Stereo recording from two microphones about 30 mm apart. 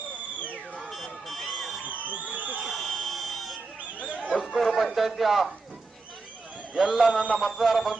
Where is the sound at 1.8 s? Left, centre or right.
Right.